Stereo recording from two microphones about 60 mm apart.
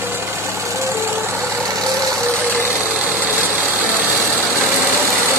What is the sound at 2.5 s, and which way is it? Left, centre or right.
Vehicle, right.